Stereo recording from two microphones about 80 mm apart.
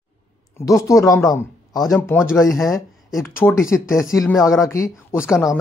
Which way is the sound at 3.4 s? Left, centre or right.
Left.